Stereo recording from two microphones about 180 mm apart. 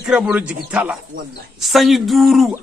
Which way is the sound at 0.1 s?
5° right (ahead or behind).